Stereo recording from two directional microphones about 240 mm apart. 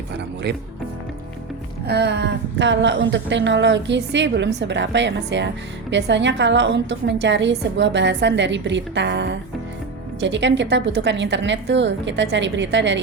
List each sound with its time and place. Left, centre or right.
1.9 s a woman's voice: right